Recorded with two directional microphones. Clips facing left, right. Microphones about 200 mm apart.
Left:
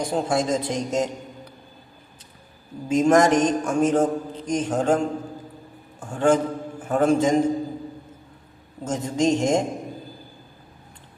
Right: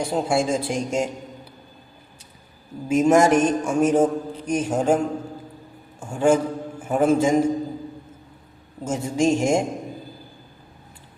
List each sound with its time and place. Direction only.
0.0 s a man's voice: 10° right (ahead or behind)
2.9 s a man's voice: 10° right (ahead or behind)
8.8 s a man's voice: 10° right (ahead or behind)